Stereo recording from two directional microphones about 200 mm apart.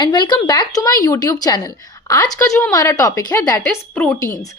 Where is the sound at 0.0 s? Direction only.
20° left (ahead or behind).